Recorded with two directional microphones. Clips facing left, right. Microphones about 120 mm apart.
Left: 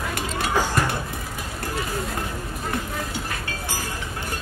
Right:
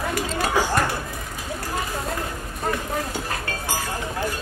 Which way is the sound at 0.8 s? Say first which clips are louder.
Right 1 dB; centre (ahead or behind).